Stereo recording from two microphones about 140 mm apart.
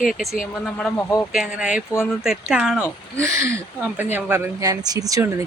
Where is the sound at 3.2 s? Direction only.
20° right (ahead or behind).